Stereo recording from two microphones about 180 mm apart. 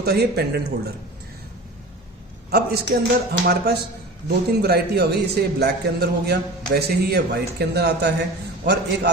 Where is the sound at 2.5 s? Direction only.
65° right (ahead or behind).